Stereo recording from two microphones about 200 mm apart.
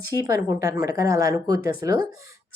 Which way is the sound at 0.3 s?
15° right (ahead or behind).